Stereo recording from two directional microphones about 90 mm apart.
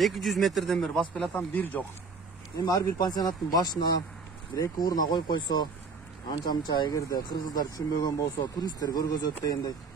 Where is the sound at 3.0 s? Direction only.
50° left (ahead or behind).